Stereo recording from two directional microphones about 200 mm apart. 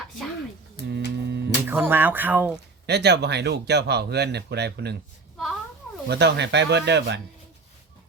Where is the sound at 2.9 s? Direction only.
55° right (ahead or behind).